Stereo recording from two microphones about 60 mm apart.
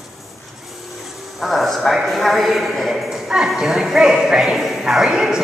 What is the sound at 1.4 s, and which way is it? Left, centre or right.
A woman's voice, centre.